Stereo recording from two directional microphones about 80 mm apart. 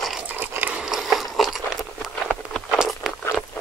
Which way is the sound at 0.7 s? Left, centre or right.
Centre.